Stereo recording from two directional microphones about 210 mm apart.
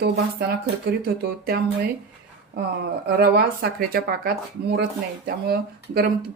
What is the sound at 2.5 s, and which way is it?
Speech, 50° right (ahead or behind).